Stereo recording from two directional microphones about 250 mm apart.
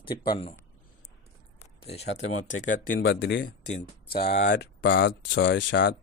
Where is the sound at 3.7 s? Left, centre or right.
Left.